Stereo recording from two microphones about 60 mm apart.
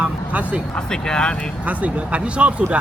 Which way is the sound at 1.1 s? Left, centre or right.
Centre.